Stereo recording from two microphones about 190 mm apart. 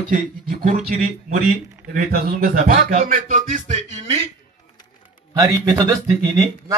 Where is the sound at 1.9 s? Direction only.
50° right (ahead or behind); by 4.3 s 30° right (ahead or behind).